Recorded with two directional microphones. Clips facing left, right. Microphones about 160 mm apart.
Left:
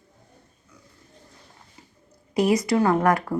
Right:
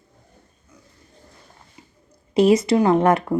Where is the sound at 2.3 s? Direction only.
25° right (ahead or behind).